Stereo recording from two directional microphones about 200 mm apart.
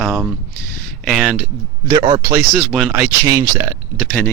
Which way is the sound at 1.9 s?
25° right (ahead or behind).